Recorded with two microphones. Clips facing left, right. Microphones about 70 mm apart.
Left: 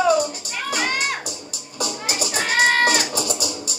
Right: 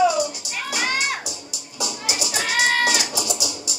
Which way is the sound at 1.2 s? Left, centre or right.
Left.